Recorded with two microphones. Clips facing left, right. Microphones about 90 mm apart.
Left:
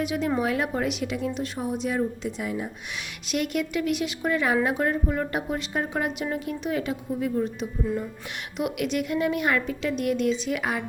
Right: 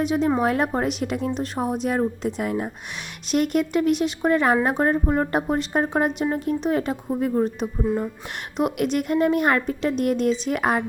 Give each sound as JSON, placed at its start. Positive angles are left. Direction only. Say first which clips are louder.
{"t": 0.0, "sound": "a woman's voice", "louder": "right 5 dB", "side_deg": -30}